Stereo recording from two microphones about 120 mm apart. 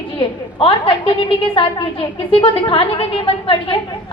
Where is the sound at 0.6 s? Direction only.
45° left (ahead or behind).